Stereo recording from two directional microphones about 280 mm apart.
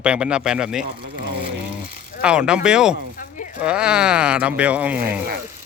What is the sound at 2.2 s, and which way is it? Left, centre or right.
Speech, centre.